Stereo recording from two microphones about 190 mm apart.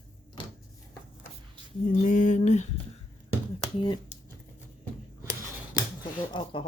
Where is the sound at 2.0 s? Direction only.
40° left (ahead or behind).